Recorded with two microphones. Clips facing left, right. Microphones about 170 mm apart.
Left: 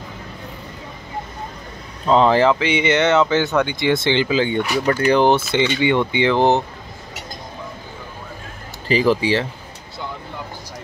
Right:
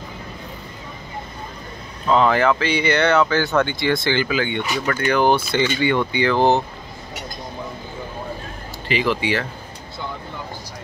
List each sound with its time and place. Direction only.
2.0 s speech: 30° left (ahead or behind)
8.8 s speech: 35° left (ahead or behind)